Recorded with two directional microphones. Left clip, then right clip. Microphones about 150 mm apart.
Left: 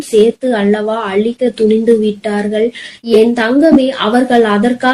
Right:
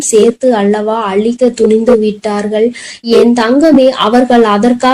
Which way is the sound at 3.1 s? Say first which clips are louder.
Right 2 dB; 25° right (ahead or behind).